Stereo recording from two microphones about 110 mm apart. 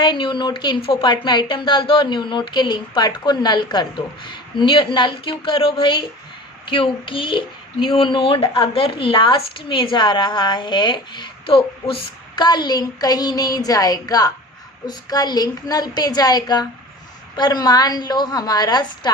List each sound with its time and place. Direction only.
0.0 s speech: 45° left (ahead or behind)
12.5 s speech: 40° left (ahead or behind)